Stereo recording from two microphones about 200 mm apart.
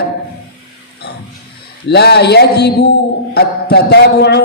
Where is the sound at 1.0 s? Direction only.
55° left (ahead or behind).